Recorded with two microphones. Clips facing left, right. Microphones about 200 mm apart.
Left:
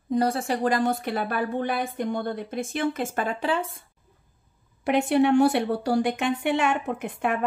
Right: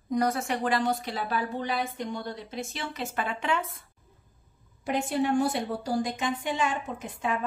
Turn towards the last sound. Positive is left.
turn(degrees=65)  # may be behind; listen again after turning